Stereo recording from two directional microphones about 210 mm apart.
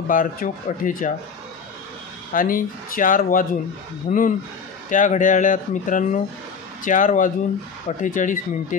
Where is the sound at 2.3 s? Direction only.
40° left (ahead or behind).